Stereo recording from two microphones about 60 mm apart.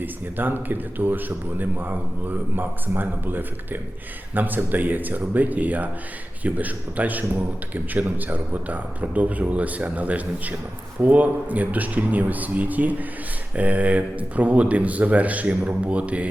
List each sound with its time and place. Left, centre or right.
0.0 s a man's voice: right